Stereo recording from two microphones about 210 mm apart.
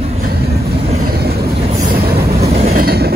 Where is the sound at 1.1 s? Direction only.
50° right (ahead or behind).